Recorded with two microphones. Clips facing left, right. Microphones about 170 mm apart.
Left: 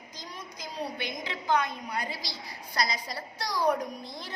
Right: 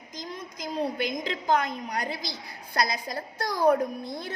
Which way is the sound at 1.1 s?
45° right (ahead or behind).